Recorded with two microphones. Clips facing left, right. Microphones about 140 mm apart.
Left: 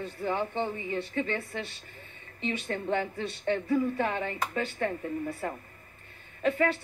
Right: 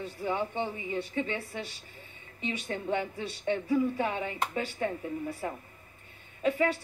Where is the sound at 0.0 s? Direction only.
10° right (ahead or behind).